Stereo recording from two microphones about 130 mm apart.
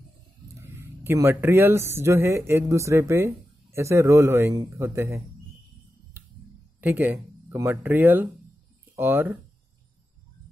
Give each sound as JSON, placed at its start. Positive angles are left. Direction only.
{"t": 0.6, "sound": "speech", "side_deg": -20}
{"t": 6.8, "sound": "speech", "side_deg": -15}